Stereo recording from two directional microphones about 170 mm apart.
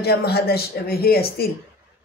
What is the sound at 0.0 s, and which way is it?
Speech, 70° left (ahead or behind).